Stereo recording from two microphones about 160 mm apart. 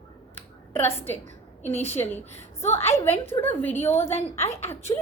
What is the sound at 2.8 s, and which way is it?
Speech, 40° left (ahead or behind).